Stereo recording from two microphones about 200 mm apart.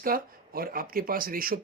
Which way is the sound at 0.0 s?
45° right (ahead or behind).